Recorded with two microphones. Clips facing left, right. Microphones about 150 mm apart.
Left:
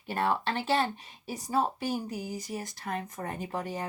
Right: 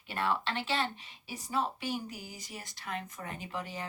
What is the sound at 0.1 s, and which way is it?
Speech, 45° left (ahead or behind).